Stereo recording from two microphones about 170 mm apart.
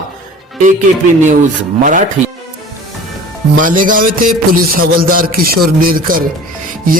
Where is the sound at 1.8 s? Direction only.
50° right (ahead or behind).